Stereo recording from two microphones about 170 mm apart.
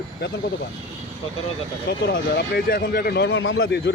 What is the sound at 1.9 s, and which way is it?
Speech, 70° left (ahead or behind).